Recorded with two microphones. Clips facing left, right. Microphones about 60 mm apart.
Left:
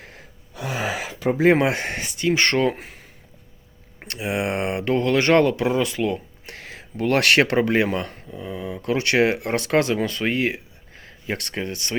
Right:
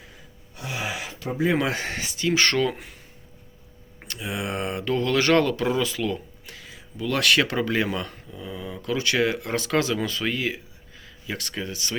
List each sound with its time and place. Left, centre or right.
0.0 s gasp: left
1.3 s speech: left
1.7 s speech: left
2.8 s a sound: left
4.2 s speech: left
6.4 s a sound: left
7.5 s speech: left
8.3 s speech: left
8.8 s speech: left